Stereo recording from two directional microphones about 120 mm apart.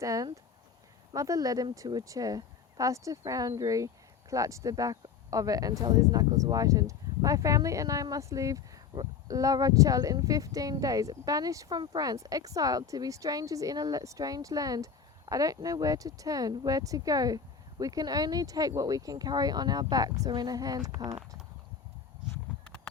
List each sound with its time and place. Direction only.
0.0 s speech: 25° right (ahead or behind)
22.6 s clip-clop: 10° left (ahead or behind)